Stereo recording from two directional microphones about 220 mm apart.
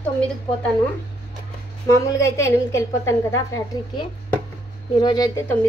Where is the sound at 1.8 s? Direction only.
15° left (ahead or behind).